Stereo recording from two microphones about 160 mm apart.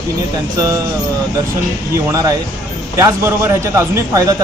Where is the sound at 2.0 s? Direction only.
20° right (ahead or behind).